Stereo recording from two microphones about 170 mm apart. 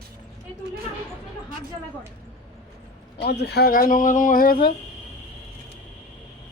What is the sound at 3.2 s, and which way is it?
Speech, 75° left (ahead or behind).